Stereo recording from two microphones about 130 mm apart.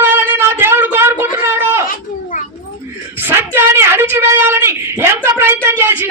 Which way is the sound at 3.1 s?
15° right (ahead or behind).